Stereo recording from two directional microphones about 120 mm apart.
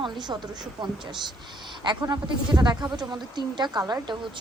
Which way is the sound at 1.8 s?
40° right (ahead or behind).